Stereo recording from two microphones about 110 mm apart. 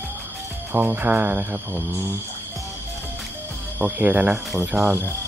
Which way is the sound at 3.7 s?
15° right (ahead or behind).